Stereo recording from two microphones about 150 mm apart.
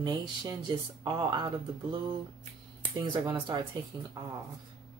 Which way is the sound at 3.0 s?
30° right (ahead or behind).